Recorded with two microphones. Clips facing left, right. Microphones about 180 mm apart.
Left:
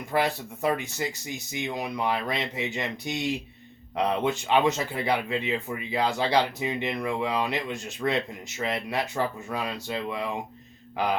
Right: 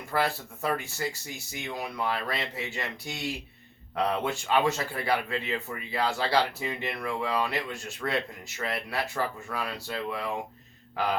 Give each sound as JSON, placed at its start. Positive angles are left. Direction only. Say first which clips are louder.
{"t": 0.1, "sound": "speech", "louder": "left 2 dB", "side_deg": 15}